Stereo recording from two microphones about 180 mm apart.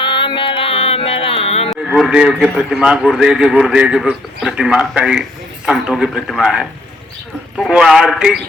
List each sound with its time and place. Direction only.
0.0 s music: 25° left (ahead or behind)
1.7 s a man's voice: centre (ahead or behind)